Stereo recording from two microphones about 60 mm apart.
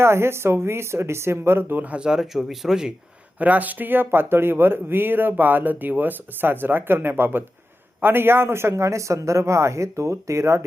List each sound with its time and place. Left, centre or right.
0.0 s speech: right
1.8 s speech: right
2.0 s speech: centre
3.3 s speech: right